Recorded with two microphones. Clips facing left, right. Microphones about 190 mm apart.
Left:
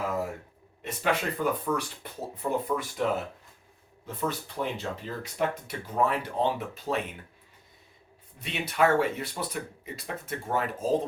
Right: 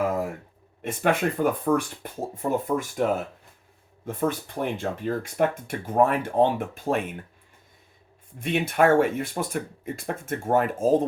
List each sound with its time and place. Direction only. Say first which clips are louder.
0.8 s speech: right 5 dB; 50° right (ahead or behind)
8.4 s speech: right 4 dB; 50° right (ahead or behind)